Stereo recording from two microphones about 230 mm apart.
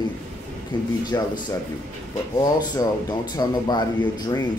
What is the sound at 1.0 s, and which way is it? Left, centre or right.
Speech, centre.